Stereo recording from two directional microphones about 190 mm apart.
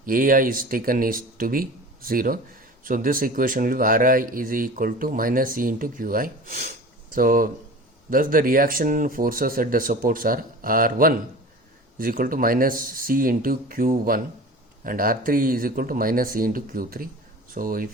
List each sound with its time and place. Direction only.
0.0 s speech: 45° right (ahead or behind)